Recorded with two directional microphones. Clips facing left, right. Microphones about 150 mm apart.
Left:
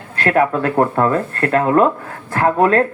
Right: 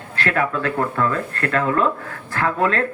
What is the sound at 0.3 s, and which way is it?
Speech, 30° left (ahead or behind).